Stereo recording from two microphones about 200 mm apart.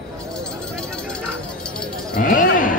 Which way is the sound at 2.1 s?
40° left (ahead or behind).